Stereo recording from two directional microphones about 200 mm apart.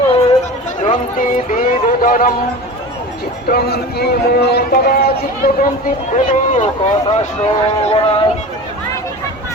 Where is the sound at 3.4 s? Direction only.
50° left (ahead or behind).